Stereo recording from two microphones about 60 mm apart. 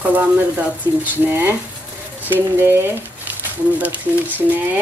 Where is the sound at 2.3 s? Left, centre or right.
Right.